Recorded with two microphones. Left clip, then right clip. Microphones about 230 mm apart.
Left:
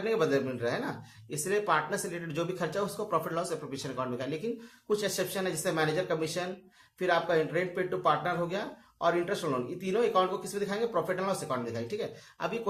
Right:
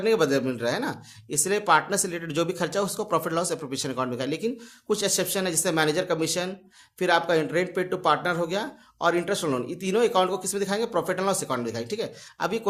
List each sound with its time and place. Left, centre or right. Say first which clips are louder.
0.0 s speech: right 6 dB; right